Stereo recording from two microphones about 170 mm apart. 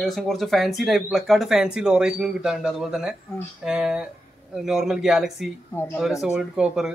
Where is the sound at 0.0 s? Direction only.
Centre (ahead or behind).